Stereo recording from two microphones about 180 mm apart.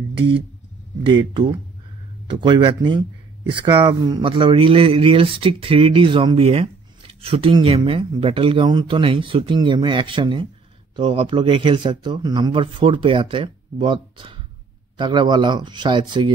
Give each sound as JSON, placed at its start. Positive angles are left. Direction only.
{"t": 1.0, "sound": "speech", "side_deg": -30}